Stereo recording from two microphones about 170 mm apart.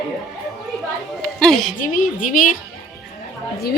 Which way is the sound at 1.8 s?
50° left (ahead or behind).